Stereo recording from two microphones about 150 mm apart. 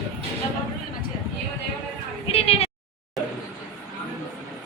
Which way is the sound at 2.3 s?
40° left (ahead or behind).